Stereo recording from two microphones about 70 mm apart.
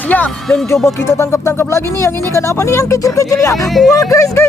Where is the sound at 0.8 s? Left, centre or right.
Left.